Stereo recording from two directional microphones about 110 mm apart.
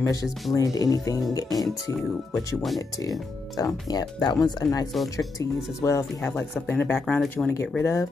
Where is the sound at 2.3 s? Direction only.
Centre (ahead or behind).